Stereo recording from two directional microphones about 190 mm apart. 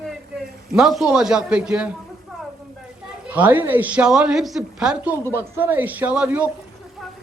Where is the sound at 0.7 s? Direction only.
Centre (ahead or behind).